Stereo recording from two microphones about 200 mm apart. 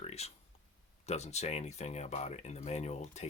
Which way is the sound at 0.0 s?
30° left (ahead or behind).